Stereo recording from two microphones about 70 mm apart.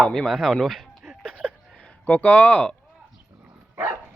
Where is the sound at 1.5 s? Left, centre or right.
Centre.